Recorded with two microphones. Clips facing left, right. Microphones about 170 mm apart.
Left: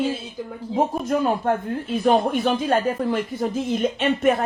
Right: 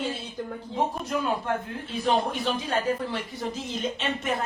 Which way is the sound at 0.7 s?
50° left (ahead or behind).